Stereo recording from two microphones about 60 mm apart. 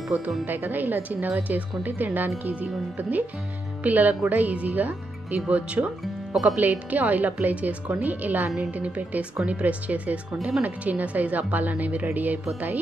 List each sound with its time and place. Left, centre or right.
0.1 s a woman's voice: right